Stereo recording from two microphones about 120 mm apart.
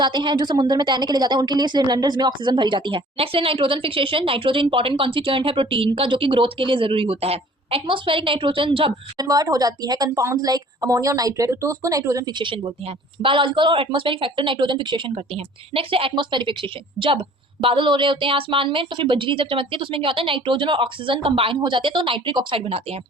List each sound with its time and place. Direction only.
0.0 s a woman's voice: 40° right (ahead or behind)
9.1 s a woman's voice: 30° right (ahead or behind)
12.4 s a woman's voice: 45° right (ahead or behind)